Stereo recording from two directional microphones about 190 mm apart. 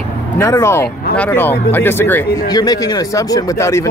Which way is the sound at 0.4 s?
15° left (ahead or behind).